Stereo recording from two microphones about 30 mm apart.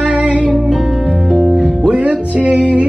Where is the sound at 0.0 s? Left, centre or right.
Right.